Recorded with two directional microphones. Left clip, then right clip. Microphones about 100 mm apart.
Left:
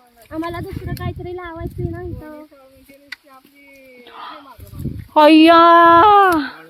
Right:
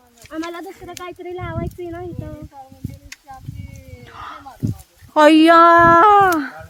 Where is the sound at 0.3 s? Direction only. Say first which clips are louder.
Left 2 dB; centre (ahead or behind).